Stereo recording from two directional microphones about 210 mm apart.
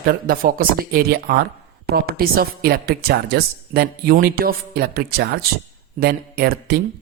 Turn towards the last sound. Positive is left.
turn(degrees=-50)  # may be behind; listen again after turning